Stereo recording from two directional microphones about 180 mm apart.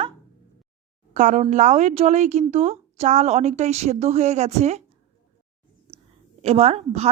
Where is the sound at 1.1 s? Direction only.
40° right (ahead or behind).